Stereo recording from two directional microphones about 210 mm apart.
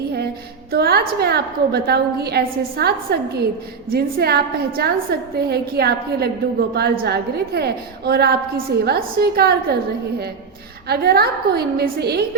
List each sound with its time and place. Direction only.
0.7 s a woman's voice: 50° right (ahead or behind)
10.8 s a woman's voice: 50° right (ahead or behind)